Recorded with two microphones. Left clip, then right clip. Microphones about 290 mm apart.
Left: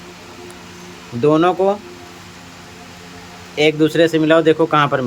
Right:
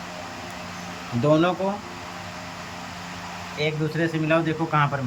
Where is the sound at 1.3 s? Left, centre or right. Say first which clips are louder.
Left 6 dB; centre.